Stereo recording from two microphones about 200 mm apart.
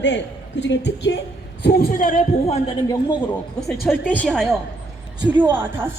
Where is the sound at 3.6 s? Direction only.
Centre (ahead or behind).